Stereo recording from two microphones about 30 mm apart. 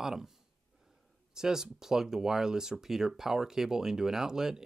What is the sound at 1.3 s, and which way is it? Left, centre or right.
Speech, centre.